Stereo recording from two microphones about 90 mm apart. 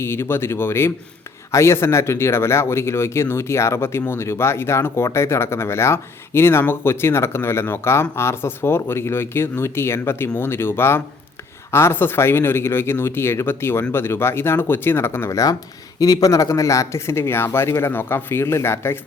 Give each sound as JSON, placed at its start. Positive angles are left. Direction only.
{"t": 0.0, "sound": "speech", "side_deg": 25}